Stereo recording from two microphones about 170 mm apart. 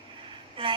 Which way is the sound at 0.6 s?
30° right (ahead or behind).